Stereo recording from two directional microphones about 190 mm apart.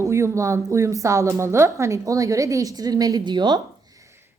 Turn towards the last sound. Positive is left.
turn(degrees=-25)  # may be behind; listen again after turning